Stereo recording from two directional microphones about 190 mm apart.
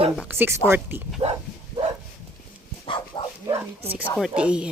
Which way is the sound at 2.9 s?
25° left (ahead or behind).